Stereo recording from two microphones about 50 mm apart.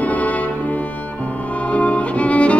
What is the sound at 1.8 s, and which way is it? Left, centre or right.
Violin, left.